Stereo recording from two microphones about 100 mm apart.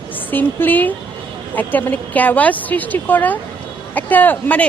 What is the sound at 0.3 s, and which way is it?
A woman's voice, 20° left (ahead or behind).